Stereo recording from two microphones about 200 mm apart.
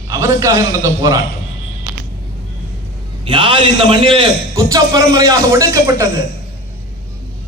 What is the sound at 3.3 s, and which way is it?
A man's voice, 25° right (ahead or behind).